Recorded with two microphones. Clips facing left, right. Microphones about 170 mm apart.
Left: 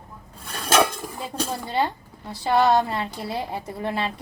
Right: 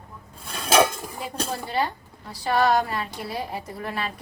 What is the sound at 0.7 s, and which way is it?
Dishes, centre (ahead or behind).